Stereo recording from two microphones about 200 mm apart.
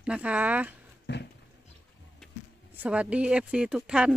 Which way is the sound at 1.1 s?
60° left (ahead or behind).